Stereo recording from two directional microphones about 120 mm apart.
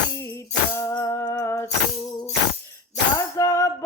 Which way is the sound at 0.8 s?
25° left (ahead or behind).